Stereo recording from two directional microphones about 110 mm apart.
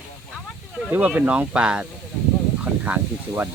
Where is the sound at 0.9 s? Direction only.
15° right (ahead or behind).